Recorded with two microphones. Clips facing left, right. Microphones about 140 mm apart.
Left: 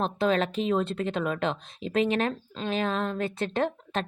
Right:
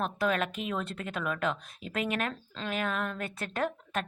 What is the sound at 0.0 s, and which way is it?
Speech, 30° left (ahead or behind).